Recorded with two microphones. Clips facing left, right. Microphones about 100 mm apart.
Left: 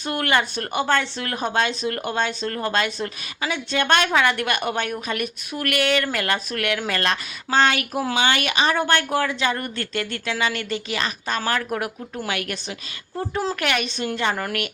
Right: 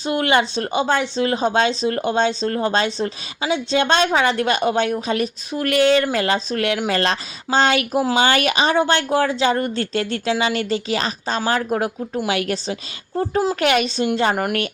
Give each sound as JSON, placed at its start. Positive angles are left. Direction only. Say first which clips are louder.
{"t": 0.0, "sound": "speech", "louder": "right 4 dB", "side_deg": -20}
{"t": 8.8, "sound": "speech", "louder": "right 3 dB", "side_deg": -20}
{"t": 9.2, "sound": "speech", "louder": "right 5 dB", "side_deg": -35}